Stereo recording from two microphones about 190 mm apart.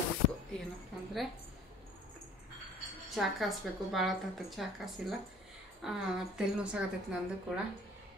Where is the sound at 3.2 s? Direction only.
Centre (ahead or behind).